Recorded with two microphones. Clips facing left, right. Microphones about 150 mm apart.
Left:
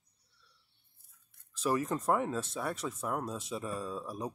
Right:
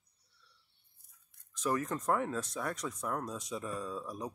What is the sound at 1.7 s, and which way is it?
Speech, 10° left (ahead or behind).